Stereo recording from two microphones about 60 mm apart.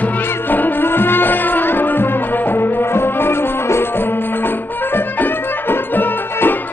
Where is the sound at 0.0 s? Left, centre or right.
Left.